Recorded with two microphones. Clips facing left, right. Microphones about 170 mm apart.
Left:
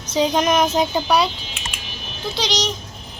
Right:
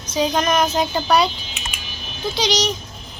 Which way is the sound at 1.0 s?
5° left (ahead or behind).